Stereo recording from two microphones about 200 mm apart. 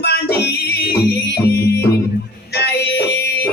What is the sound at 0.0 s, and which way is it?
Music, 55° left (ahead or behind).